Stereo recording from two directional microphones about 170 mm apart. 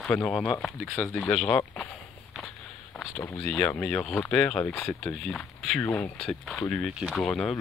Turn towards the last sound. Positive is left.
turn(degrees=5)  # may be behind; listen again after turning